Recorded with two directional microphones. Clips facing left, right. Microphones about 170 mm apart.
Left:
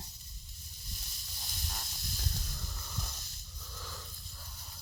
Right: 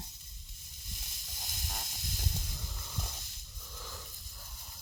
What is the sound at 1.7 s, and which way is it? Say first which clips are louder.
Snake: right 3 dB; 15° right (ahead or behind).